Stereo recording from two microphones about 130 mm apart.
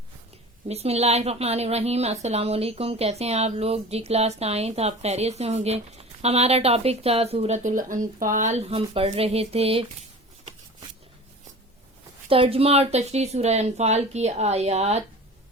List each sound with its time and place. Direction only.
0.7 s speech: 55° right (ahead or behind); by 8.6 s 70° right (ahead or behind)
8.7 s speech: 45° right (ahead or behind)
12.3 s speech: 45° right (ahead or behind)